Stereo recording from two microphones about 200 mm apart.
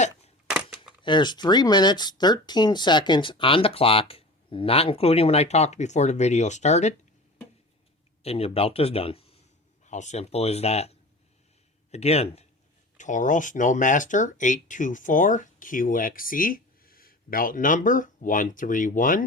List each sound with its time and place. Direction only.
1.0 s speech: 25° left (ahead or behind)
8.2 s speech: 30° left (ahead or behind)